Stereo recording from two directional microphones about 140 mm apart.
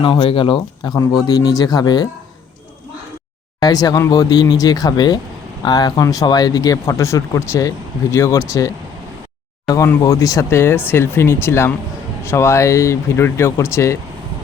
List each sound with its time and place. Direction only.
0.0 s speech: 40° left (ahead or behind)
3.6 s speech: 25° left (ahead or behind)